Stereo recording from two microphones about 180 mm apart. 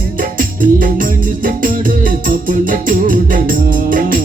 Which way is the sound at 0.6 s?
50° right (ahead or behind).